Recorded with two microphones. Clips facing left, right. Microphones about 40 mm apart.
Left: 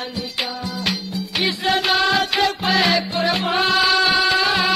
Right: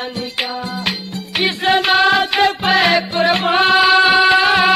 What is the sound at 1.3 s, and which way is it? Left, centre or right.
Music, right.